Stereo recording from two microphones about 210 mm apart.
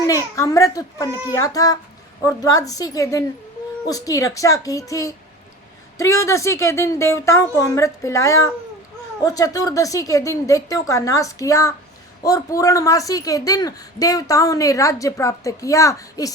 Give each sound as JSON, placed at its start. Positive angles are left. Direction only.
{"t": 0.1, "sound": "a woman's voice", "side_deg": 15}